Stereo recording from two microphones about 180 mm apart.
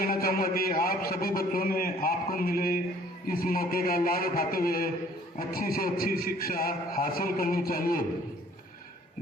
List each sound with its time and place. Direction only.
0.0 s a man's voice: 55° left (ahead or behind)